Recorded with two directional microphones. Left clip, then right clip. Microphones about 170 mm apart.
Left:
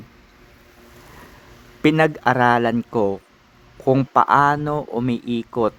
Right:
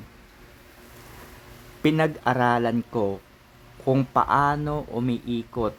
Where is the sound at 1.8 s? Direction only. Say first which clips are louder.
Left 6 dB; 25° left (ahead or behind).